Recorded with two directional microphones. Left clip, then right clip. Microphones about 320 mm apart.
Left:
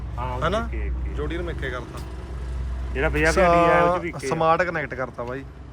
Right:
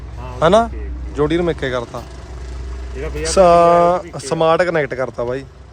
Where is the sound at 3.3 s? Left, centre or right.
Centre.